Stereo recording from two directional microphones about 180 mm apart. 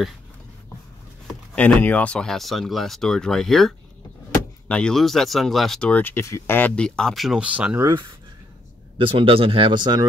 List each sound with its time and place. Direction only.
1.2 s speech: 5° left (ahead or behind); by 7.9 s 10° right (ahead or behind)
8.9 s speech: 30° right (ahead or behind)